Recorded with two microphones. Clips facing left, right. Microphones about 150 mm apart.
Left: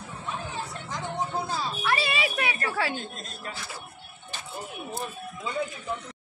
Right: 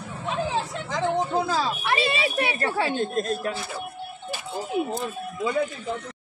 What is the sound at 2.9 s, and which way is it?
Speech, 60° right (ahead or behind).